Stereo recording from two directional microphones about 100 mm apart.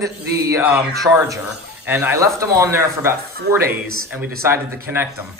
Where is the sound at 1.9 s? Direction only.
25° right (ahead or behind).